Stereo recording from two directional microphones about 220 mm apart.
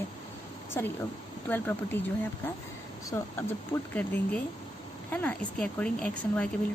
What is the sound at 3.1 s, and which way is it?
A woman's voice, 10° left (ahead or behind).